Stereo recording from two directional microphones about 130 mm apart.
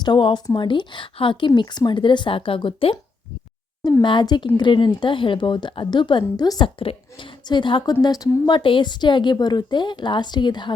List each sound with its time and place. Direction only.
0.0 s a woman's voice: 40° left (ahead or behind)
4.0 s a woman's voice: 35° left (ahead or behind)